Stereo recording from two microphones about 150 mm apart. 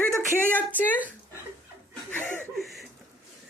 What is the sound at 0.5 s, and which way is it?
Speech, 10° left (ahead or behind).